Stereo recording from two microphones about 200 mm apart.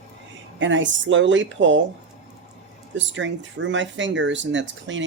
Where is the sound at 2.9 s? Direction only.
65° right (ahead or behind).